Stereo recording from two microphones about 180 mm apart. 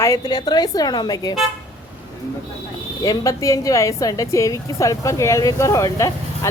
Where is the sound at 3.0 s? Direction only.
20° left (ahead or behind).